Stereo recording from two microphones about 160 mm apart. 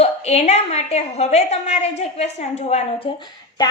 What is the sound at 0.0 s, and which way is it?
A woman's voice, 40° left (ahead or behind).